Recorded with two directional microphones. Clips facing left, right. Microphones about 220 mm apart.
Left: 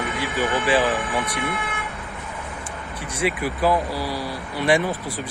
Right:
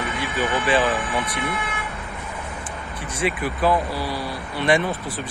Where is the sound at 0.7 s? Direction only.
15° left (ahead or behind).